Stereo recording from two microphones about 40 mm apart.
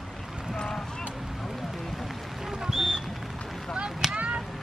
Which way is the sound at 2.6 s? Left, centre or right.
Centre.